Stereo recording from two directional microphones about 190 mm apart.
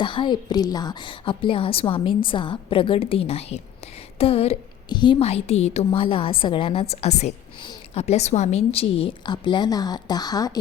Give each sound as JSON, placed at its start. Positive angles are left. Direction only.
{"t": 0.0, "sound": "a woman's voice", "side_deg": 25}